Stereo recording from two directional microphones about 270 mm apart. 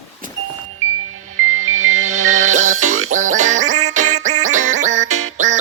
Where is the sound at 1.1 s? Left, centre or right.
Right.